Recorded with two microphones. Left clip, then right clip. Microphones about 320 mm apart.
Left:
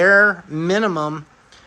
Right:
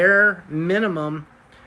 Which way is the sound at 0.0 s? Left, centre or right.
Centre.